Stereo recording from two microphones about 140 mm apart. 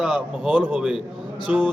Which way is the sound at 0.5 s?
10° right (ahead or behind).